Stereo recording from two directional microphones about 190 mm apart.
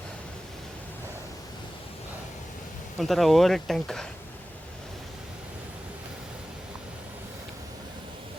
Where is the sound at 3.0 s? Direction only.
Centre (ahead or behind).